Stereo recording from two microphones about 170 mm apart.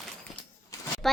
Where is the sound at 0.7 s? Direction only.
20° left (ahead or behind).